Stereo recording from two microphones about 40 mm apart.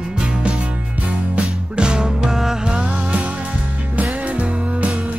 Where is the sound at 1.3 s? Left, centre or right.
Right.